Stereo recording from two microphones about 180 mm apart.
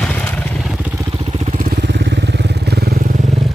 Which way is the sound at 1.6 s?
70° right (ahead or behind).